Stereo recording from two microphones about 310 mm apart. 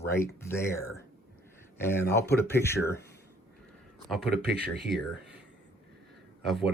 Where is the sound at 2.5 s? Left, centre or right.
Centre.